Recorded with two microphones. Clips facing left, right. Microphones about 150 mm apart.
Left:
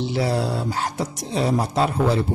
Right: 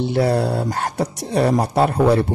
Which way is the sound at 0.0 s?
55° right (ahead or behind).